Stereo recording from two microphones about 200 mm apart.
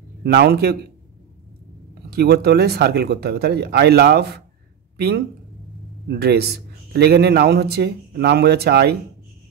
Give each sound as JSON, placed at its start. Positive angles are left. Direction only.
{"t": 0.2, "sound": "a man's voice", "side_deg": -55}
{"t": 2.0, "sound": "a man's voice", "side_deg": -55}